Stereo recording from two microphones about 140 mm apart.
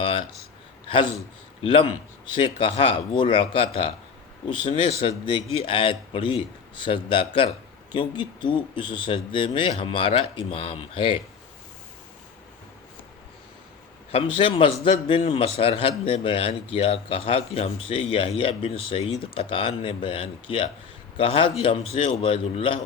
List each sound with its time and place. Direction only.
0.0 s a sound: 40° left (ahead or behind)
0.9 s a man's voice: 35° left (ahead or behind)
14.1 s speech: 40° left (ahead or behind)